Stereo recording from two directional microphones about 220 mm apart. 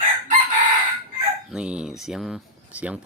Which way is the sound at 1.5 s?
5° right (ahead or behind).